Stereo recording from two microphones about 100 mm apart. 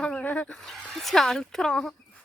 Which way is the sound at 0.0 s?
15° left (ahead or behind).